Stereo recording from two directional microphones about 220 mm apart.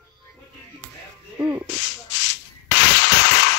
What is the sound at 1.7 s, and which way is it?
Sanding, 55° left (ahead or behind).